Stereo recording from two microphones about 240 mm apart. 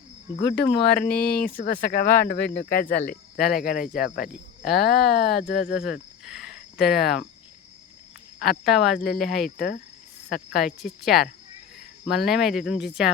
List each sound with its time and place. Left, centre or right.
0.3 s speech: left
4.6 s speech: centre
5.5 s speech: left
5.8 s cricket: centre
8.6 s speech: centre
9.6 s speech: left
10.3 s speech: centre